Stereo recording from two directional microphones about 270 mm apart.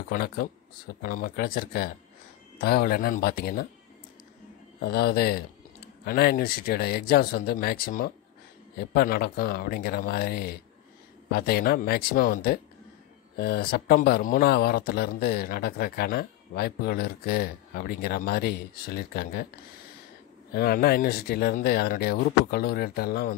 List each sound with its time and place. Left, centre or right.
0.1 s speech: left
4.8 s speech: left
20.5 s speech: left